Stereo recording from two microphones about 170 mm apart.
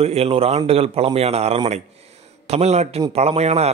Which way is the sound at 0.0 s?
35° right (ahead or behind).